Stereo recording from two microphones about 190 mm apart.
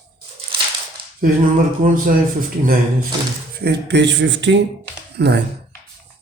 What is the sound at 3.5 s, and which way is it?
Speech, 60° right (ahead or behind).